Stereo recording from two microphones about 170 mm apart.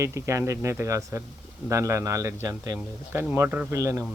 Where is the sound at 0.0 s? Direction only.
15° right (ahead or behind).